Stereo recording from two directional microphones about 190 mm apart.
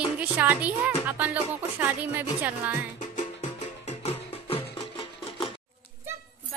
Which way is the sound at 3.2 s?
35° left (ahead or behind).